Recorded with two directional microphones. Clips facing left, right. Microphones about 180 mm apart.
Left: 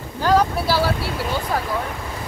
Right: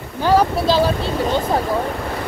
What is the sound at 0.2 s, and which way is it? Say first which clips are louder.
Speech: right 2 dB; 15° right (ahead or behind).